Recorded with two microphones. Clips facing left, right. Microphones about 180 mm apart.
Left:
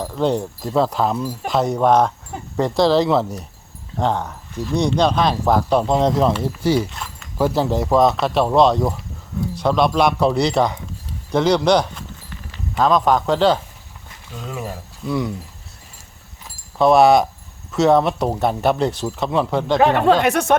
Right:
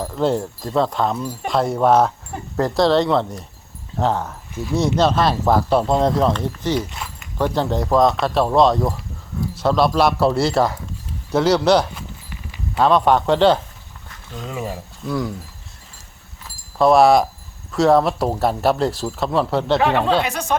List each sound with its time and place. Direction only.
0.0 s speech: centre (ahead or behind)
6.9 s speech: 5° right (ahead or behind)
11.3 s a sound: 5° right (ahead or behind)
13.3 s speech: 5° left (ahead or behind)
16.7 s speech: centre (ahead or behind)
19.8 s speech: 45° left (ahead or behind)